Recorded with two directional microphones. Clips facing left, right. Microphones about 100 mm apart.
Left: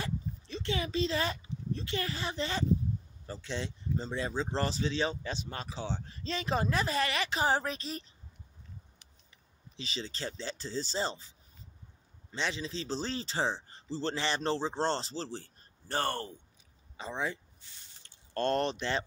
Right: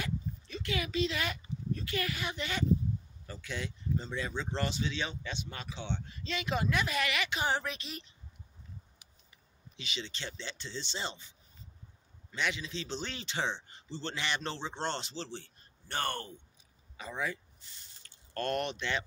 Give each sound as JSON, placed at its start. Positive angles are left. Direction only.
{"t": 0.0, "sound": "speech", "side_deg": 30}
{"t": 9.8, "sound": "speech", "side_deg": 35}
{"t": 12.3, "sound": "speech", "side_deg": 30}